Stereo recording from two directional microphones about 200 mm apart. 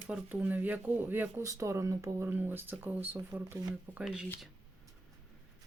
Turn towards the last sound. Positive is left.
turn(degrees=-5)  # may be behind; listen again after turning